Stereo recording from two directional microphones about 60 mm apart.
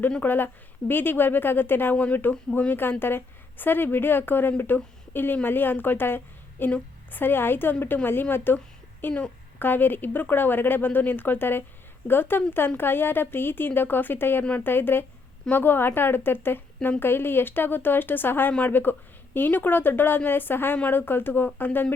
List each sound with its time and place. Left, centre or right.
0.2 s a woman's voice: left